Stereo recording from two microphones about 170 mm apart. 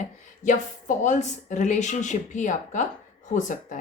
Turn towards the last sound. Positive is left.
turn(degrees=45)  # may be behind; listen again after turning